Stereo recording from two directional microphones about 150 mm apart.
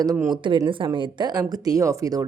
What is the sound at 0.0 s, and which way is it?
A woman's voice, 25° right (ahead or behind).